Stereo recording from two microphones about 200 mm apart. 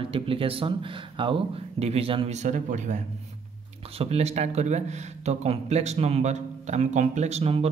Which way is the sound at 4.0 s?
30° right (ahead or behind).